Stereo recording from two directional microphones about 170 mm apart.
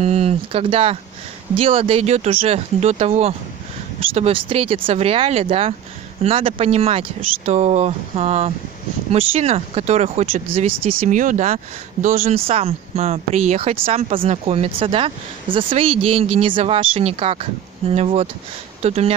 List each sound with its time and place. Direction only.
0.0 s speech: 35° right (ahead or behind)
10.7 s speech: 60° right (ahead or behind)
12.4 s speech: 35° right (ahead or behind)